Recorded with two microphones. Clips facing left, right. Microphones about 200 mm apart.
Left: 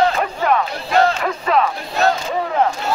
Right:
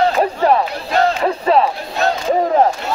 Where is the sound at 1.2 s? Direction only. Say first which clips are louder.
Right 4 dB; 30° right (ahead or behind).